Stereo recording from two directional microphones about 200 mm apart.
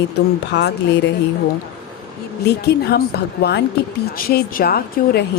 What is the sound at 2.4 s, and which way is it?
A woman's voice, 55° left (ahead or behind).